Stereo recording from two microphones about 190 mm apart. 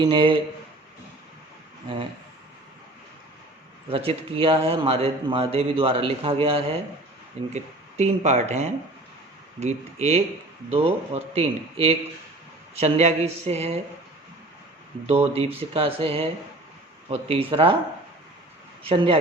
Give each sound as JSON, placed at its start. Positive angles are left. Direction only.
{"t": 0.0, "sound": "speech", "side_deg": -25}
{"t": 3.8, "sound": "a man's voice", "side_deg": -30}
{"t": 15.0, "sound": "a man's voice", "side_deg": -30}
{"t": 18.8, "sound": "speech", "side_deg": -30}